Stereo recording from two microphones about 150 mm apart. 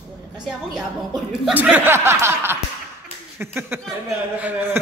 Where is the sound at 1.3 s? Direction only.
5° right (ahead or behind).